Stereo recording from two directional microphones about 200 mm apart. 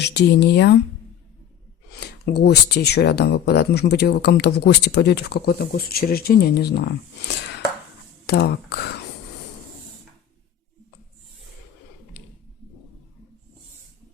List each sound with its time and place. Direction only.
0.0 s speech: 60° left (ahead or behind)
2.0 s speech: 55° left (ahead or behind)